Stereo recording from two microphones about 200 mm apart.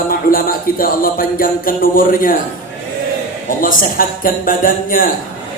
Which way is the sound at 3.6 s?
45° left (ahead or behind).